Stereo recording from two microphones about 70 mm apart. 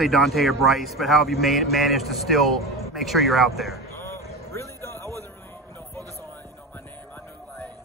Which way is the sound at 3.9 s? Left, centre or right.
Left.